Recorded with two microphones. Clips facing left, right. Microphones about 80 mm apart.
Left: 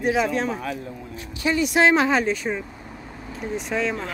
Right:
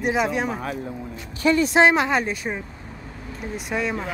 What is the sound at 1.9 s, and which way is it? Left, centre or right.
Speech, centre.